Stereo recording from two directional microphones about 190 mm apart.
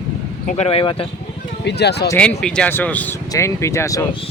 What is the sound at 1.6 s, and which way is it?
Speech, 60° left (ahead or behind).